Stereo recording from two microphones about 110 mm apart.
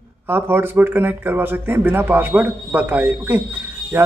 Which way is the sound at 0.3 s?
20° right (ahead or behind).